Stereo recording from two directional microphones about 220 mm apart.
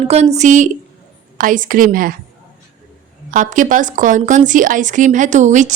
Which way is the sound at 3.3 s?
35° right (ahead or behind).